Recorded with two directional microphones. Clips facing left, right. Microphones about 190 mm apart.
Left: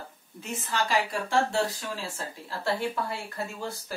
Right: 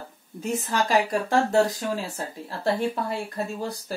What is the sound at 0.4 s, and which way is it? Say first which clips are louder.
A woman's voice: right 5 dB; 40° right (ahead or behind).